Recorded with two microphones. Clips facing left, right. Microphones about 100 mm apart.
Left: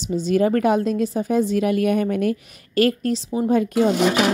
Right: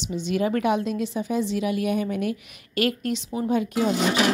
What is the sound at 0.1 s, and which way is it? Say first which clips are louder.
A woman's voice: left 6 dB; 40° left (ahead or behind).